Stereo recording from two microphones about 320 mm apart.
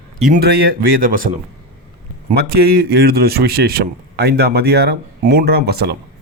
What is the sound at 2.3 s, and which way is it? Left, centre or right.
A man's voice, right.